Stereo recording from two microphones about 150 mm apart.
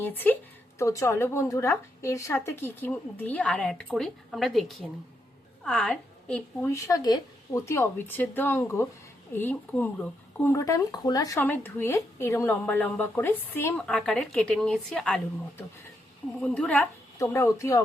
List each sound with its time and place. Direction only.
0.0 s speech: 15° left (ahead or behind)
13.7 s speech: 5° left (ahead or behind)
17.2 s speech: 20° left (ahead or behind)